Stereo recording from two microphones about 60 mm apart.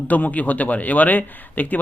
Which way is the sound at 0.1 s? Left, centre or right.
Left.